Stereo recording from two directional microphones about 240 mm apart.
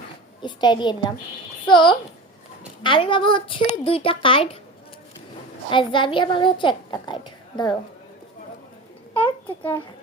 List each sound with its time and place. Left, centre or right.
0.4 s a woman's voice: centre
5.7 s a woman's voice: centre
9.1 s a child's voice: centre